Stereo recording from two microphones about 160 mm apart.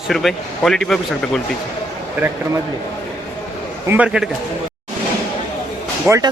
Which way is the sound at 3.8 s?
10° right (ahead or behind).